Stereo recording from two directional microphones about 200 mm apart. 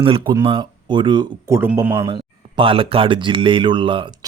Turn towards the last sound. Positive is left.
turn(degrees=-25)  # may be behind; listen again after turning